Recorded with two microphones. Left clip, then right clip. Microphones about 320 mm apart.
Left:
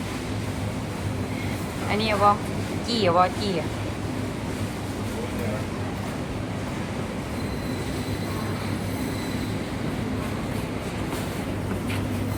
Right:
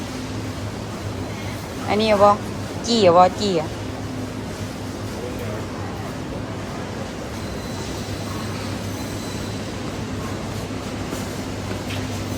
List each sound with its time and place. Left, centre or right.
1.9 s speech: centre